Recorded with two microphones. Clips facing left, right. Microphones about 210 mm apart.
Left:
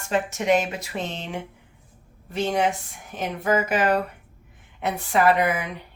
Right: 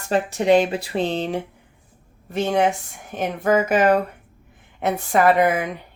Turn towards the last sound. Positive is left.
turn(degrees=-45)  # may be behind; listen again after turning